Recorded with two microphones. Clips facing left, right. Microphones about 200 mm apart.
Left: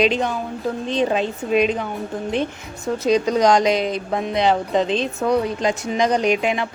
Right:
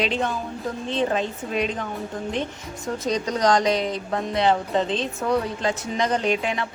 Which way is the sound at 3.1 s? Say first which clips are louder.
Left 5 dB; 10° left (ahead or behind).